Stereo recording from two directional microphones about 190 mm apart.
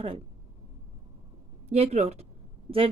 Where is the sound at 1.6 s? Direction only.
35° right (ahead or behind).